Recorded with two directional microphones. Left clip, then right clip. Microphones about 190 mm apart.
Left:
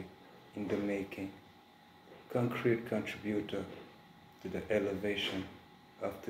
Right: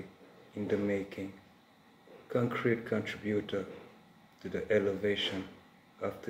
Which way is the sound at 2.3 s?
15° right (ahead or behind).